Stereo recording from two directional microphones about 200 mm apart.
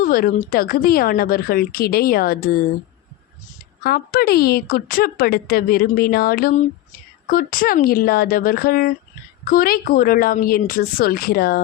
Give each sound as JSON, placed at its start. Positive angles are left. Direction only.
{"t": 0.0, "sound": "a woman's voice", "side_deg": 45}
{"t": 3.8, "sound": "a woman's voice", "side_deg": 50}